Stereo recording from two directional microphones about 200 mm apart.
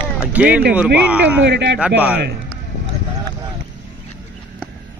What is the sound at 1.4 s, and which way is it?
Speech, 60° right (ahead or behind).